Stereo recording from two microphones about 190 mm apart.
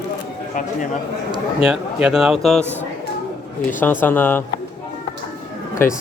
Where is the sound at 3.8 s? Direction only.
10° left (ahead or behind).